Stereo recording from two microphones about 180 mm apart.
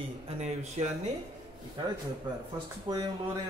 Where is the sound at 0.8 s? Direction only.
40° right (ahead or behind).